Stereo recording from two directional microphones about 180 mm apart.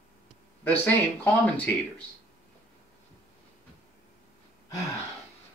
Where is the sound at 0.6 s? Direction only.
10° left (ahead or behind).